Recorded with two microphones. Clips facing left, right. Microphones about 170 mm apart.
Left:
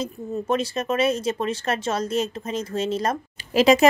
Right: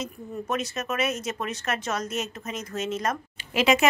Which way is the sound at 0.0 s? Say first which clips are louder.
Left 5 dB; 30° left (ahead or behind).